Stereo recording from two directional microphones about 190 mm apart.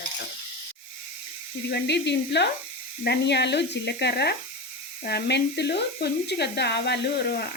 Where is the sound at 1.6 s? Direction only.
60° left (ahead or behind).